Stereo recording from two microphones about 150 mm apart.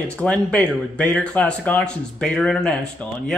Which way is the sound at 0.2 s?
10° left (ahead or behind).